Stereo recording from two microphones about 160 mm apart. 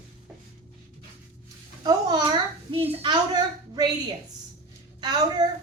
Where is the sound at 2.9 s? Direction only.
30° right (ahead or behind).